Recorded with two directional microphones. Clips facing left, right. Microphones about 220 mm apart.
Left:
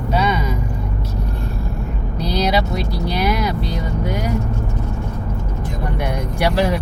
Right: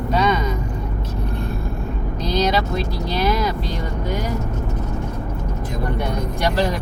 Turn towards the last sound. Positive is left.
turn(degrees=10)  # may be behind; listen again after turning